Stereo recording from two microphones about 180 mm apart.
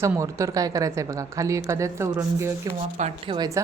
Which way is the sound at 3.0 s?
25° right (ahead or behind).